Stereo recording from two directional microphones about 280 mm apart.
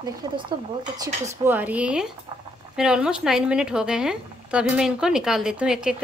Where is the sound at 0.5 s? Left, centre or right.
Centre.